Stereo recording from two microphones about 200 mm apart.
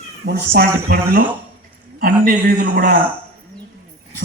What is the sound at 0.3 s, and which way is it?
Speech, 50° right (ahead or behind).